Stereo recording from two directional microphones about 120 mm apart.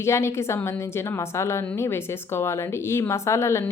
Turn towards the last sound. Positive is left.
turn(degrees=25)  # may be behind; listen again after turning